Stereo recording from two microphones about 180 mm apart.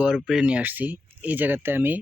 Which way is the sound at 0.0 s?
5° right (ahead or behind).